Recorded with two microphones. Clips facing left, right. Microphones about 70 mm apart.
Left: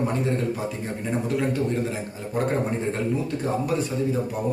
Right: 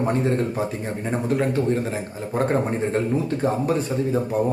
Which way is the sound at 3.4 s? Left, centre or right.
Right.